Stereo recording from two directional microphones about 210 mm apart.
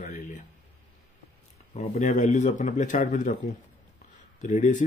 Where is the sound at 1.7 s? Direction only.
35° left (ahead or behind).